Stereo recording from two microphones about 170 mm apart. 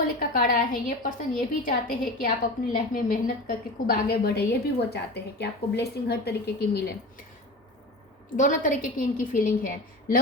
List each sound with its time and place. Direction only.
0.2 s a woman's voice: 50° left (ahead or behind); by 7.3 s 70° left (ahead or behind)
8.4 s a woman's voice: 50° left (ahead or behind)